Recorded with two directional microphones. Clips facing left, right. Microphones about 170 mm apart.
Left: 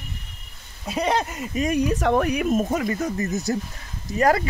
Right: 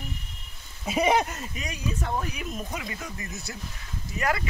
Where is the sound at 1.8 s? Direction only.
80° left; by 4.4 s 40° left (ahead or behind).